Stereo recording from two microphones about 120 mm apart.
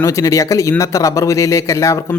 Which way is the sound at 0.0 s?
25° left (ahead or behind).